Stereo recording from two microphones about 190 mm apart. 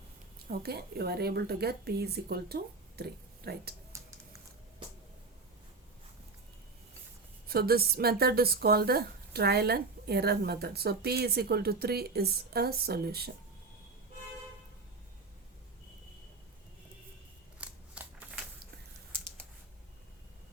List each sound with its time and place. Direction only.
0.5 s speech: 55° right (ahead or behind)
7.5 s speech: 55° right (ahead or behind)
17.6 s scissors: 5° right (ahead or behind)